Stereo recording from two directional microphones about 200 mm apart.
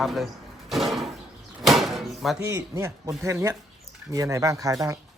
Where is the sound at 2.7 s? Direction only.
15° right (ahead or behind).